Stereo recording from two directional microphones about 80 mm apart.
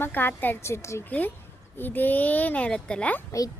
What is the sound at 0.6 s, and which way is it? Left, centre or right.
Speech, left.